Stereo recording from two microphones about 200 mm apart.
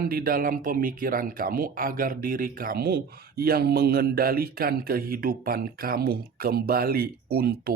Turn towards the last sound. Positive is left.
turn(degrees=-50)  # may be behind; listen again after turning